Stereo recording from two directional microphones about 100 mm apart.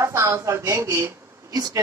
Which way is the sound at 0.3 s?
30° right (ahead or behind).